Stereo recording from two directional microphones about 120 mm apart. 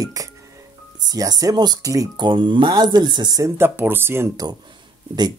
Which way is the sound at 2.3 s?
40° right (ahead or behind).